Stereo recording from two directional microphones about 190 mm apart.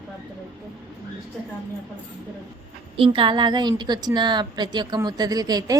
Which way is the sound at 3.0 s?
25° right (ahead or behind).